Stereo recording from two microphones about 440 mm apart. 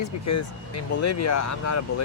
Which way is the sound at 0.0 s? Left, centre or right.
Left.